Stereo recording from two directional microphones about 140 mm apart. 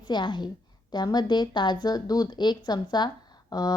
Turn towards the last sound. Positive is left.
turn(degrees=30)  # may be behind; listen again after turning